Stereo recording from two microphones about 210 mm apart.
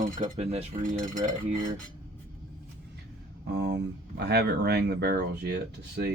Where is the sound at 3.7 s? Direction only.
55° right (ahead or behind).